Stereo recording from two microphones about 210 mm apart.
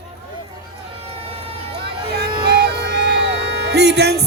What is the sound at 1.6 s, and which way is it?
Vehicle, 25° right (ahead or behind).